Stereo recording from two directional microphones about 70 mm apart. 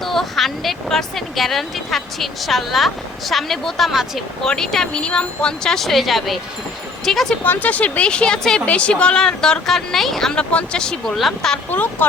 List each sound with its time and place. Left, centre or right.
0.0 s speech: centre
7.4 s speech: left; by 11.6 s centre
11.7 s speech: left